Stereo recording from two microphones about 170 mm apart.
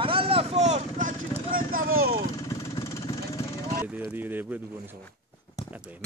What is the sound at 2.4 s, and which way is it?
Vehicle, 20° left (ahead or behind).